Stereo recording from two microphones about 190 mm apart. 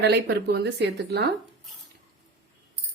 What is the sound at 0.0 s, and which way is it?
A woman's voice, 60° right (ahead or behind).